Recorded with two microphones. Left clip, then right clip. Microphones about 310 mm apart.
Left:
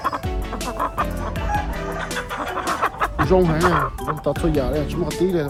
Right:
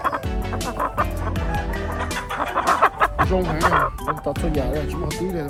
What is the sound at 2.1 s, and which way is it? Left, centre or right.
Music, centre.